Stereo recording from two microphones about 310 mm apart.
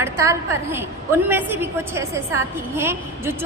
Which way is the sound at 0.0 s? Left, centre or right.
Centre.